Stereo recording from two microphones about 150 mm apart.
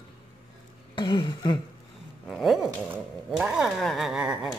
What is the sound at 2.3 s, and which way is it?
Dog, centre (ahead or behind).